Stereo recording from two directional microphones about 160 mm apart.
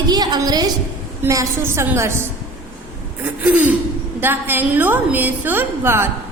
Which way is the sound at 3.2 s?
10° right (ahead or behind).